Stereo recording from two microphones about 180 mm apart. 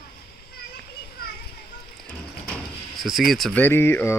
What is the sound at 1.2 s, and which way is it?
Children playing, 60° left (ahead or behind).